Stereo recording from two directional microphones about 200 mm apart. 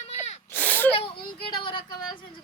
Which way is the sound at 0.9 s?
25° left (ahead or behind).